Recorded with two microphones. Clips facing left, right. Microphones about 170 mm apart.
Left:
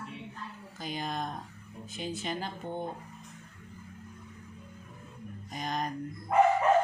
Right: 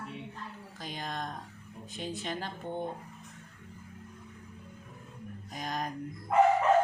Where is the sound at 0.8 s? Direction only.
5° left (ahead or behind).